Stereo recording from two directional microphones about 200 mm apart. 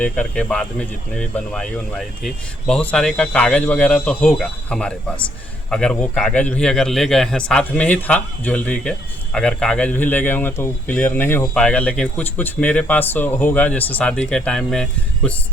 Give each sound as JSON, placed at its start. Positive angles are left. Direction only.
{"t": 0.0, "sound": "a man's voice", "side_deg": 5}